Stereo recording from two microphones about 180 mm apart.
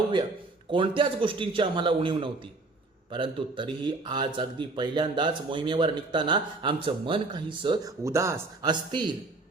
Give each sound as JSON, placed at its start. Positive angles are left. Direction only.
{"t": 0.7, "sound": "speech", "side_deg": -25}